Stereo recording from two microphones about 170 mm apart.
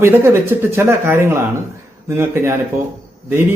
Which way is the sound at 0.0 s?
15° right (ahead or behind).